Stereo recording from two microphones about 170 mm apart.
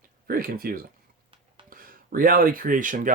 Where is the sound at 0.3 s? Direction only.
60° right (ahead or behind).